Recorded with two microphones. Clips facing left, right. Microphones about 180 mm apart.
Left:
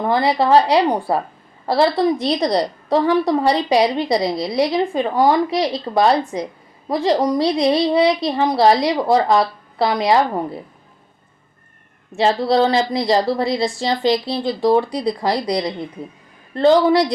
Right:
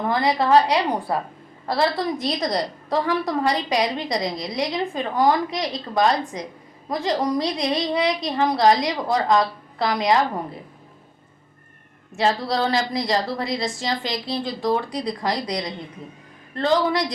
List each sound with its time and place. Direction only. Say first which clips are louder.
0.1 s a woman's voice: left 3 dB; 30° left (ahead or behind)
12.1 s a woman's voice: left 6 dB; 25° left (ahead or behind)